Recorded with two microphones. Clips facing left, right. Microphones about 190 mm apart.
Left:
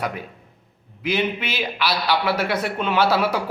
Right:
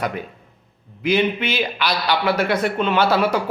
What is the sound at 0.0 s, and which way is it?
A man's voice, 5° left (ahead or behind).